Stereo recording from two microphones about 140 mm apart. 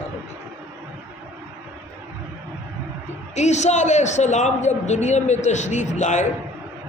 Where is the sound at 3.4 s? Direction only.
55° left (ahead or behind).